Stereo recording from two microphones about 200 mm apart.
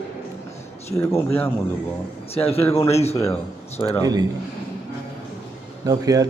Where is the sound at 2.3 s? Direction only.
30° left (ahead or behind).